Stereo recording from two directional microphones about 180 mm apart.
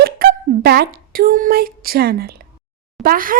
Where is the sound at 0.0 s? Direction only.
60° right (ahead or behind).